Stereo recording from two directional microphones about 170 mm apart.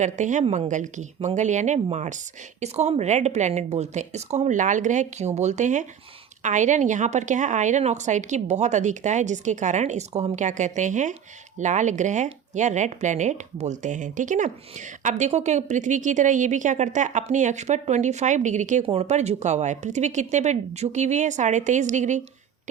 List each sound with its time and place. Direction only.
0.0 s a woman's voice: 45° right (ahead or behind)